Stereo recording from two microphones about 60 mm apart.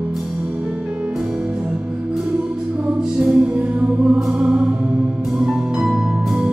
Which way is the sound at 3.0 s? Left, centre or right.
Centre.